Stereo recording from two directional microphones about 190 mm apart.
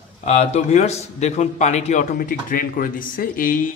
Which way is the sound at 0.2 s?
35° left (ahead or behind).